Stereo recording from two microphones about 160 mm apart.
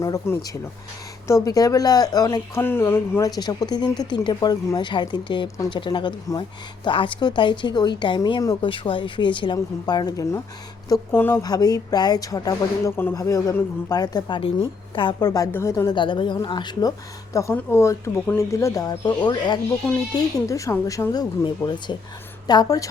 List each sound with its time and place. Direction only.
0.0 s speech: 20° left (ahead or behind)
16.0 s speech: 30° left (ahead or behind)
17.3 s speech: 15° left (ahead or behind)